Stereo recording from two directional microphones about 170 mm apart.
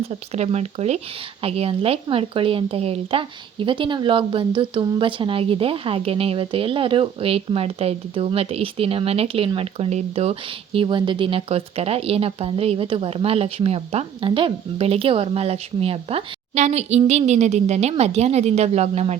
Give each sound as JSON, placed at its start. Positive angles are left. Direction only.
{"t": 0.1, "sound": "speech", "side_deg": -40}